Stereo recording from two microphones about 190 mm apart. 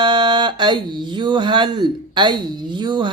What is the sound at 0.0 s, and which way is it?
Speech, 25° right (ahead or behind).